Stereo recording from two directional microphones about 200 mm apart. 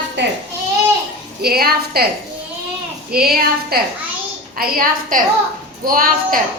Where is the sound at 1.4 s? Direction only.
50° right (ahead or behind).